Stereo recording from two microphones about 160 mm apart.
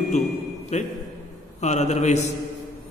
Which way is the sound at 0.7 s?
45° left (ahead or behind).